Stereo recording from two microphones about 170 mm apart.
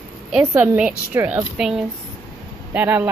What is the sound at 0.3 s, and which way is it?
A woman's voice, 5° right (ahead or behind).